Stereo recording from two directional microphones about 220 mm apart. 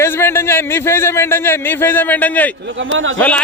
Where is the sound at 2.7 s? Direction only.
60° right (ahead or behind).